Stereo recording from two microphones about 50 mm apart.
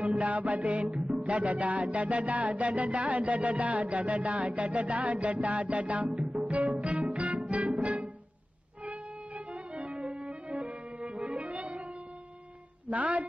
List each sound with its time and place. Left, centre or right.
0.1 s music: right
6.1 s music: centre
6.4 s music: right
12.9 s a woman's voice: right